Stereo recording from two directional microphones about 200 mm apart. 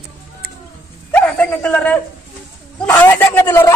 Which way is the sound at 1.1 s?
5° left (ahead or behind).